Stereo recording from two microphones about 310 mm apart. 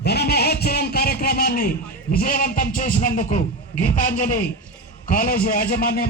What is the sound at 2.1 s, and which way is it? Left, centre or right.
A man's voice, left.